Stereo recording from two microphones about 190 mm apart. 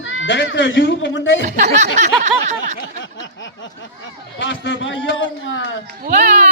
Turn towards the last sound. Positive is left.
turn(degrees=-40)  # may be behind; listen again after turning